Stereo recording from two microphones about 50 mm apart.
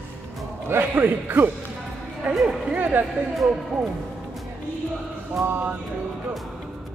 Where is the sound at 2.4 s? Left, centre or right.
Right.